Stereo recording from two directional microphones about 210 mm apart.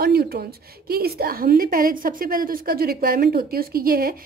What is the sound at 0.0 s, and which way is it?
A woman's voice, 45° right (ahead or behind).